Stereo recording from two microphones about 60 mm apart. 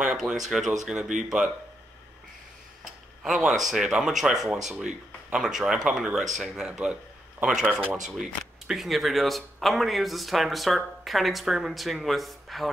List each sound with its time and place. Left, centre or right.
0.0 s speech: centre
3.3 s speech: centre